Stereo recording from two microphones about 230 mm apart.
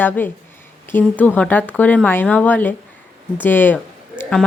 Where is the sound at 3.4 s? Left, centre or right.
Centre.